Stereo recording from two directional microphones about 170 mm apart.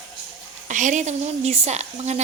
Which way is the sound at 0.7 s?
45° right (ahead or behind).